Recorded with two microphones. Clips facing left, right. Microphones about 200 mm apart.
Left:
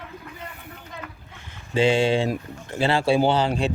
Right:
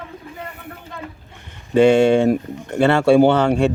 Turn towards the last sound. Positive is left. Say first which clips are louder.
# right 7 dB
turn(degrees=-65)  # may be behind; listen again after turning